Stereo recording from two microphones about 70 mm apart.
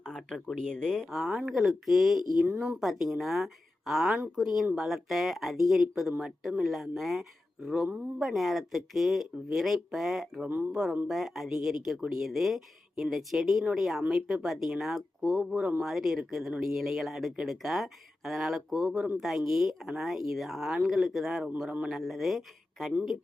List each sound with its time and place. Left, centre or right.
0.0 s a sound: centre
0.5 s speech: centre
2.4 s speech: centre
2.7 s speech: centre